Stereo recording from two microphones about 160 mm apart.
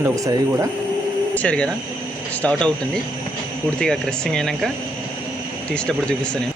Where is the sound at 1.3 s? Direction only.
10° left (ahead or behind).